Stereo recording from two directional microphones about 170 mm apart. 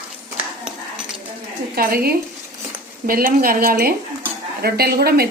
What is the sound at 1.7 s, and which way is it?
A woman's voice, 60° right (ahead or behind).